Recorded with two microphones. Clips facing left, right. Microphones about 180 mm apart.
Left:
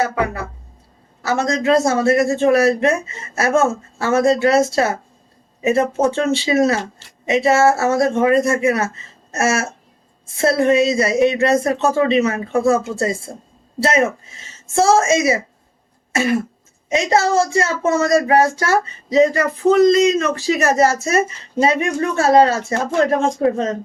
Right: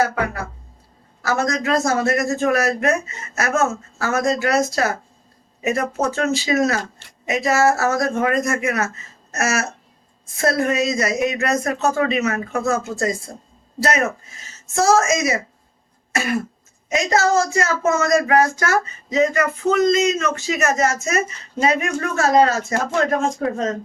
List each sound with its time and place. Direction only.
1.2 s speech: 25° left (ahead or behind)
9.3 s a sound: 30° left (ahead or behind)
10.3 s speech: 30° left (ahead or behind)
16.9 s speech: 30° left (ahead or behind)